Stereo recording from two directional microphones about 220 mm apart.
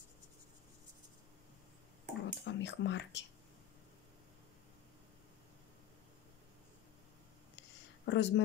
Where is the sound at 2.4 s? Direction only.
55° left (ahead or behind).